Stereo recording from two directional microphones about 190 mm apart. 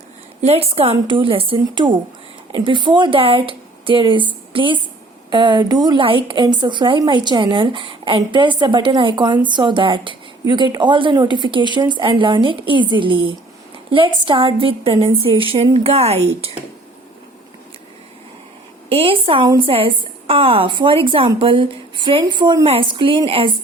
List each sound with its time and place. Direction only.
0.4 s a woman's voice: 30° right (ahead or behind)
18.9 s a woman's voice: 30° right (ahead or behind)